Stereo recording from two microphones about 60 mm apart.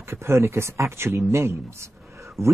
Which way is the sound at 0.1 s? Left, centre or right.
Right.